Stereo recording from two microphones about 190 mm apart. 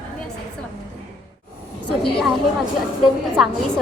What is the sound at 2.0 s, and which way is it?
Speech, centre (ahead or behind).